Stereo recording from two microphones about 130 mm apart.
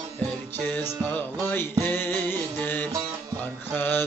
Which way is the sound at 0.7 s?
15° left (ahead or behind).